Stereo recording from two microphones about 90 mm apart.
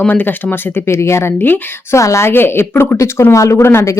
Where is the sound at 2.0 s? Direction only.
35° left (ahead or behind).